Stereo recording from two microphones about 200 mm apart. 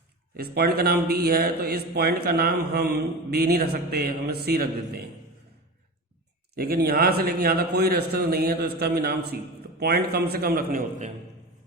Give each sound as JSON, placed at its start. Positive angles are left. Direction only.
{"t": 0.3, "sound": "a man's voice", "side_deg": -50}
{"t": 6.6, "sound": "a man's voice", "side_deg": -50}